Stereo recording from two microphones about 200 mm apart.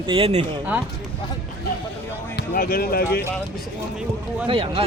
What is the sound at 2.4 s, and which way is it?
Speech, 45° left (ahead or behind).